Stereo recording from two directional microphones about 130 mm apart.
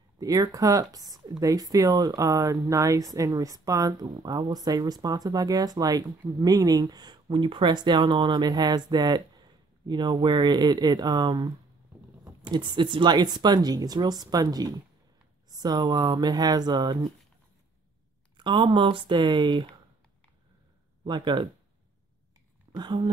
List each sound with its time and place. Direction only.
0.2 s speech: 30° right (ahead or behind)
18.4 s speech: 40° right (ahead or behind)
21.0 s speech: 35° right (ahead or behind)
22.7 s speech: 35° right (ahead or behind)